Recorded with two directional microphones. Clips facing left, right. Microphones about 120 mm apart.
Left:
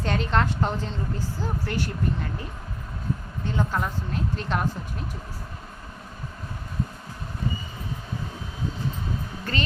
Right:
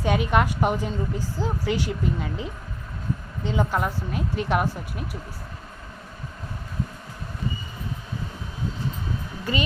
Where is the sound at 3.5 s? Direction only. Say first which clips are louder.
Right 3 dB; 15° right (ahead or behind).